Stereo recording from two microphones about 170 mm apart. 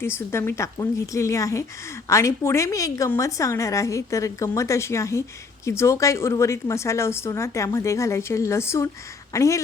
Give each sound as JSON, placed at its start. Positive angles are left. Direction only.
{"t": 0.0, "sound": "a woman's voice", "side_deg": 15}